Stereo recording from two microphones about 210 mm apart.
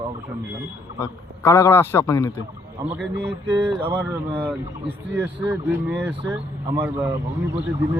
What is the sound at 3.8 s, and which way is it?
Speech, 10° right (ahead or behind).